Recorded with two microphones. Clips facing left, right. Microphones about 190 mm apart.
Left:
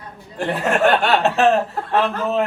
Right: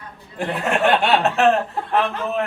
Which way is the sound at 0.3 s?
Centre (ahead or behind).